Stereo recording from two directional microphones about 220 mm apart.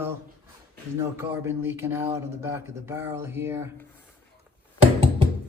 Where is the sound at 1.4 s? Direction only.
10° right (ahead or behind).